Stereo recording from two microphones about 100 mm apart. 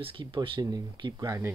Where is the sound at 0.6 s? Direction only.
40° right (ahead or behind).